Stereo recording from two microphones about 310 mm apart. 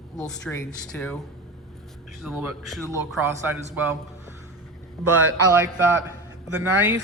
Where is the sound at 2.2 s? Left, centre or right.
Centre.